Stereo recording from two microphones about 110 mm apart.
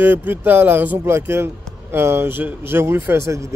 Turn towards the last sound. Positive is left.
turn(degrees=-25)  # may be behind; listen again after turning